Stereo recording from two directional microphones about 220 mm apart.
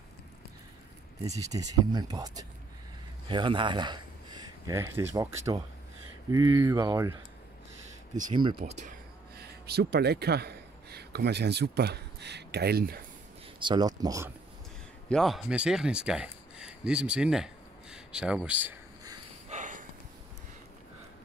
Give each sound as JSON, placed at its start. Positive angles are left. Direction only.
{"t": 1.2, "sound": "speech", "side_deg": -15}
{"t": 6.3, "sound": "speech", "side_deg": -15}
{"t": 8.6, "sound": "speech", "side_deg": -35}
{"t": 9.4, "sound": "speech", "side_deg": -45}
{"t": 13.6, "sound": "speech", "side_deg": -20}
{"t": 15.0, "sound": "speech", "side_deg": 0}
{"t": 19.5, "sound": "snort", "side_deg": -35}